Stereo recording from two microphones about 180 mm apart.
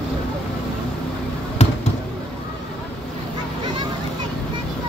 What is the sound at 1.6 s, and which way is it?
Basketball bounce, 40° left (ahead or behind).